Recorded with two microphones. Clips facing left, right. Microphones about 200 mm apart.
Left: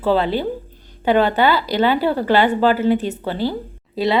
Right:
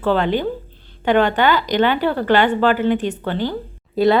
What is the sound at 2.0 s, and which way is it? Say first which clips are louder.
Speech: even; 10° left (ahead or behind).